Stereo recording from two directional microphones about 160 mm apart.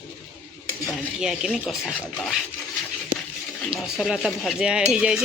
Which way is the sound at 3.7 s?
5° right (ahead or behind).